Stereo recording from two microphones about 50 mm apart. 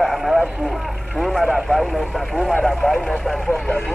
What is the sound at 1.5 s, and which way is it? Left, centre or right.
Speech, centre.